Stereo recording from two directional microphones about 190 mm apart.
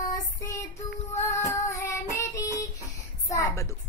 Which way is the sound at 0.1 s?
15° left (ahead or behind).